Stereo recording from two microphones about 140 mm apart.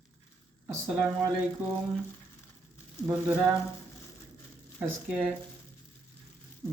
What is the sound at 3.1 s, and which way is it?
Speech, 10° right (ahead or behind).